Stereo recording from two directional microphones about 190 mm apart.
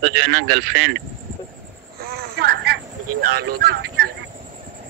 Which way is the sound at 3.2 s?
55° right (ahead or behind).